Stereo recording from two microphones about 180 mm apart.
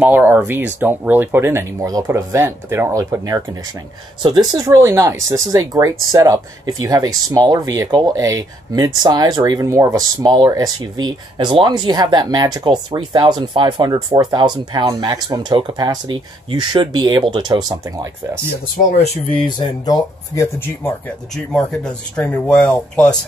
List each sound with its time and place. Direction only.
0.0 s speech: 10° right (ahead or behind)
19.3 s speech: 25° left (ahead or behind); by 23.1 s 5° left (ahead or behind)